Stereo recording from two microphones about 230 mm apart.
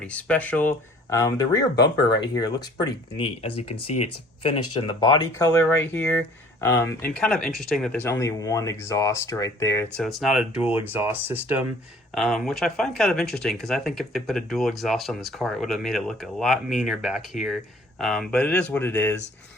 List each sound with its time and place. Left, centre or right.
0.0 s speech: centre
1.7 s speech: left
2.2 s speech: centre
3.5 s speech: left
4.8 s speech: centre
10.0 s speech: centre